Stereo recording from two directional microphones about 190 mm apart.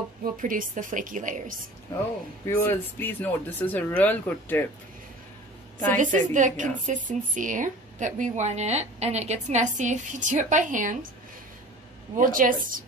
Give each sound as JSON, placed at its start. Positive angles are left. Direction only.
{"t": 0.2, "sound": "a woman's voice", "side_deg": -45}
{"t": 2.4, "sound": "speech", "side_deg": 15}
{"t": 5.9, "sound": "a woman's voice", "side_deg": -40}
{"t": 12.2, "sound": "a woman's voice", "side_deg": -45}